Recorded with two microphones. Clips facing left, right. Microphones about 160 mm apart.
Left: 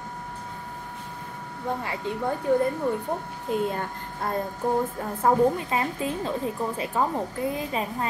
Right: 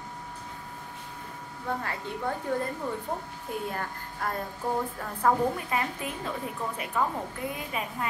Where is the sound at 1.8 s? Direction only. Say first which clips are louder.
Left 4 dB; 15° left (ahead or behind).